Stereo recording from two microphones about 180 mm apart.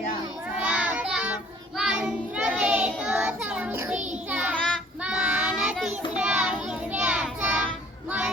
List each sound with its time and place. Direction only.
0.6 s child singing: 5° right (ahead or behind)
4.5 s child singing: 5° left (ahead or behind)